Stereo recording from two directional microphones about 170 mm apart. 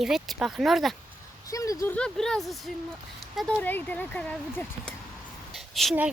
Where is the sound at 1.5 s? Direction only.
20° left (ahead or behind).